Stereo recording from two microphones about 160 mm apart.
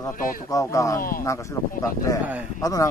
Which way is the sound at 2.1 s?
20° left (ahead or behind).